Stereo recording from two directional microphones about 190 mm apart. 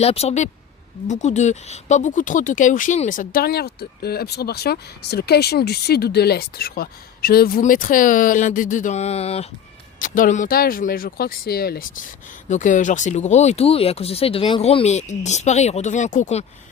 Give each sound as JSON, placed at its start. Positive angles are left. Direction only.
{"t": 0.0, "sound": "speech", "side_deg": 35}
{"t": 10.0, "sound": "speech", "side_deg": 45}
{"t": 12.5, "sound": "speech", "side_deg": 40}